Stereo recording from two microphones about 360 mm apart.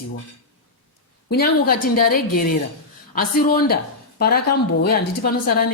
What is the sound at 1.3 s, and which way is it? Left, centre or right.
A woman's voice, left.